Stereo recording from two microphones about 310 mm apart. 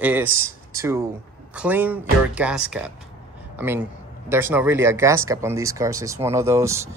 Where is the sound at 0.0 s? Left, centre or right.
Centre.